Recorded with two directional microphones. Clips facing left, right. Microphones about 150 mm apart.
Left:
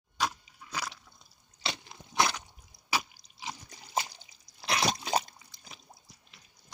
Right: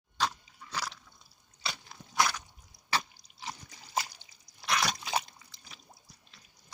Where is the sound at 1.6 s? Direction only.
20° left (ahead or behind).